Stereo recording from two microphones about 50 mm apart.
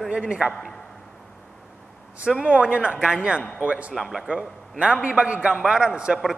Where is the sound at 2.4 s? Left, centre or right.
Right.